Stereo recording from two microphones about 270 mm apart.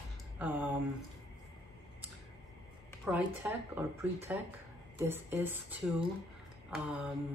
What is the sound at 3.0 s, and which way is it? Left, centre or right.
Speech, centre.